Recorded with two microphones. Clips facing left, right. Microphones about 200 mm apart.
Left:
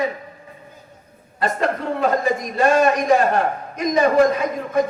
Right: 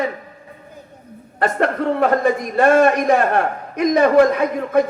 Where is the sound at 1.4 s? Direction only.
60° right (ahead or behind).